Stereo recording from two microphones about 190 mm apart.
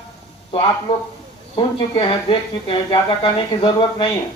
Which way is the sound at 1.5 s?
25° left (ahead or behind).